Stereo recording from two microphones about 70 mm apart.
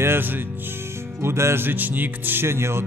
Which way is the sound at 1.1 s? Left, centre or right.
Right.